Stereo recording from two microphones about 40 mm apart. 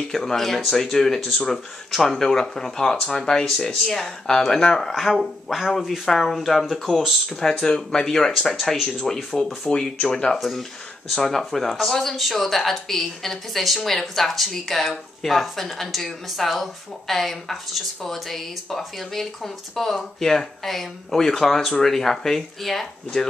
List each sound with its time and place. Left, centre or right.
0.1 s speech: centre
5.9 s speech: centre
7.2 s speech: centre
8.3 s speech: centre
10.0 s speech: left
11.2 s speech: centre